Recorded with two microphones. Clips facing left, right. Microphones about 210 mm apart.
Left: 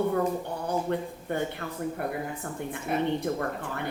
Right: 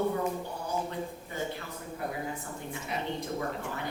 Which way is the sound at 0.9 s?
60° left (ahead or behind).